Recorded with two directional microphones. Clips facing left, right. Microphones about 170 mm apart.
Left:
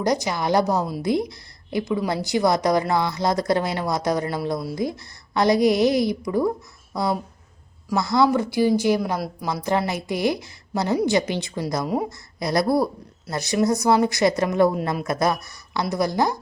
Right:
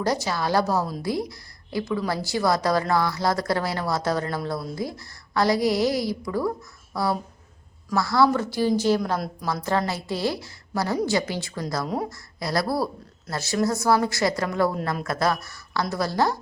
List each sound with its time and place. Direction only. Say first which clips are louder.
0.0 s a woman's voice: left 2 dB; 15° left (ahead or behind)